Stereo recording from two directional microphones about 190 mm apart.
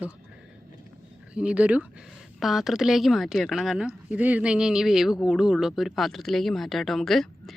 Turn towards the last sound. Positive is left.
turn(degrees=0)  # may be behind; listen again after turning